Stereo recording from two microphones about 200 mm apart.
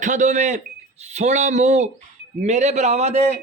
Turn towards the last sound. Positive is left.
turn(degrees=-35)  # may be behind; listen again after turning